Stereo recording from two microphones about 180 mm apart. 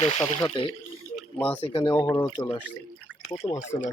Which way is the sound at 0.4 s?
25° left (ahead or behind).